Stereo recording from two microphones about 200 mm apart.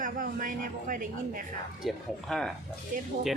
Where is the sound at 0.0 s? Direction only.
40° right (ahead or behind).